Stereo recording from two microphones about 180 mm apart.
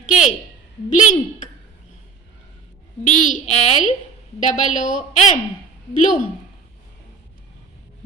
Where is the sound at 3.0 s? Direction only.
45° left (ahead or behind).